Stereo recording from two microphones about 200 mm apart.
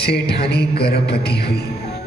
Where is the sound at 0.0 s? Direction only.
55° left (ahead or behind).